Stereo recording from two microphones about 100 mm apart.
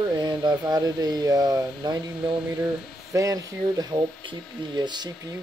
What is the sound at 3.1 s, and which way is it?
Speech, 35° right (ahead or behind).